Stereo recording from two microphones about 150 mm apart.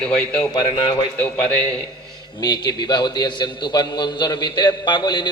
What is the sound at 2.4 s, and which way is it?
A man's voice, 25° left (ahead or behind).